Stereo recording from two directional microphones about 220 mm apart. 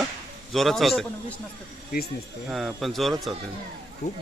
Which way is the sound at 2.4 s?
Centre (ahead or behind).